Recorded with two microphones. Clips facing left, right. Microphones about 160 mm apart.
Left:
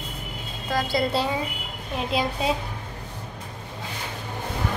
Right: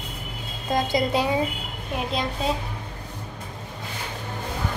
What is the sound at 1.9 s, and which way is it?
Speech, 5° left (ahead or behind).